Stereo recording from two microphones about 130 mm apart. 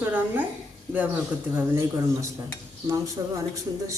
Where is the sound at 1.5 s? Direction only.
20° right (ahead or behind).